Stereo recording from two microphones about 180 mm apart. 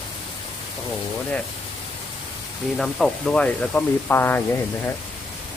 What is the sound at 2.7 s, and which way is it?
Speech, centre (ahead or behind).